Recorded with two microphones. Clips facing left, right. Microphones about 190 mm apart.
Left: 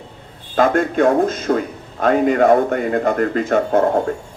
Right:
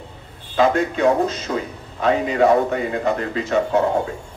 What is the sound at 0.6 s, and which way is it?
Speech, 50° left (ahead or behind).